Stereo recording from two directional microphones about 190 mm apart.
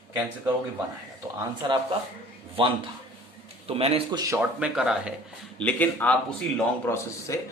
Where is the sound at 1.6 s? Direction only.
25° right (ahead or behind).